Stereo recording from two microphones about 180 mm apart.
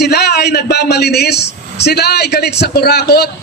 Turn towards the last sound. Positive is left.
turn(degrees=60)  # may be behind; listen again after turning